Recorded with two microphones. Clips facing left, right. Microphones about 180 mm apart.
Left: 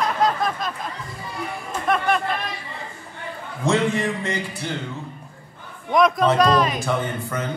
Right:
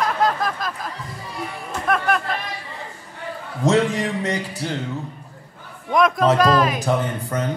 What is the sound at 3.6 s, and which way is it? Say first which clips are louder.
Speech: right 2 dB; 40° right (ahead or behind).